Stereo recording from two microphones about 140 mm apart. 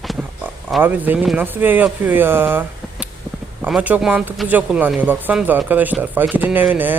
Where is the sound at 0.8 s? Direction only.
15° right (ahead or behind).